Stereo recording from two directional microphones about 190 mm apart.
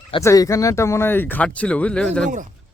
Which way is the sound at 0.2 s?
15° left (ahead or behind).